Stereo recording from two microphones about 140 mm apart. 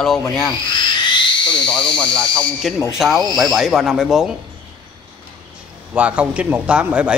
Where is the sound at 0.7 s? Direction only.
30° left (ahead or behind).